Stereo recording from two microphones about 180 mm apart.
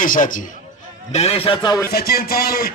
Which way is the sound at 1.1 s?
35° left (ahead or behind).